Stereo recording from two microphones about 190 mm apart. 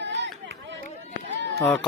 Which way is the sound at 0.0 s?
70° right (ahead or behind).